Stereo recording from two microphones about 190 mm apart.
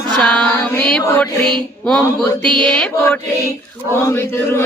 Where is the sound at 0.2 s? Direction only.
5° left (ahead or behind).